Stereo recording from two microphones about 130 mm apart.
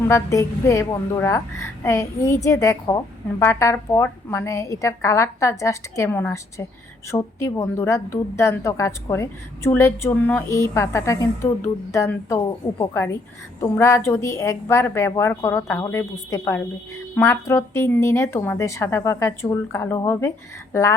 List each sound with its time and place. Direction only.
0.1 s a woman's voice: 25° left (ahead or behind)